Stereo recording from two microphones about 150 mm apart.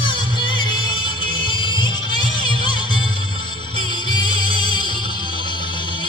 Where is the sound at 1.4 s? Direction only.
30° left (ahead or behind).